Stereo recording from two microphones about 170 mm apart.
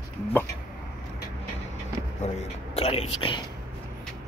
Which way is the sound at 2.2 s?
35° left (ahead or behind).